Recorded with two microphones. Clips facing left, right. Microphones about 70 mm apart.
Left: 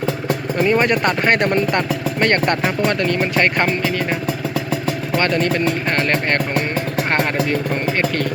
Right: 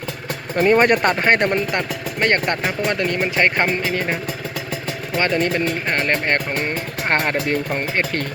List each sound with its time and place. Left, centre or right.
0.6 s speech: right
1.2 s speech: right
2.2 s speech: centre
5.1 s speech: centre